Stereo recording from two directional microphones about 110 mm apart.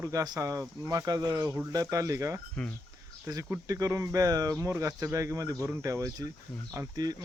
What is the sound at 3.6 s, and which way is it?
Speech, 30° right (ahead or behind).